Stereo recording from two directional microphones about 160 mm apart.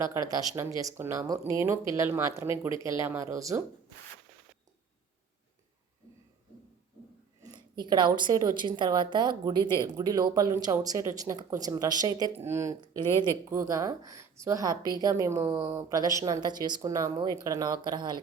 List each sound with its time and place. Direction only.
0.0 s speech: 20° right (ahead or behind)
7.4 s speech: 25° right (ahead or behind)
12.8 s speech: 30° right (ahead or behind)